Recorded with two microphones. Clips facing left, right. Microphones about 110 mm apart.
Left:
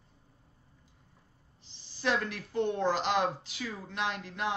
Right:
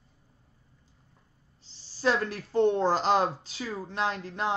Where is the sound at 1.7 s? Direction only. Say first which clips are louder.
Right 4 dB; 35° right (ahead or behind).